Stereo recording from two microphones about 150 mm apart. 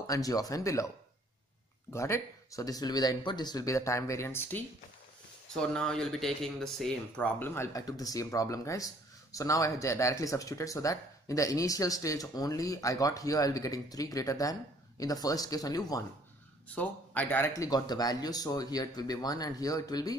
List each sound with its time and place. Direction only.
0.0 s speech: 25° left (ahead or behind)
16.6 s speech: 10° left (ahead or behind)
17.5 s speech: 25° left (ahead or behind)